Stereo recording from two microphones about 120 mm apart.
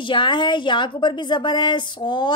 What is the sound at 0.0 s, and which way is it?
A woman's voice, 40° left (ahead or behind).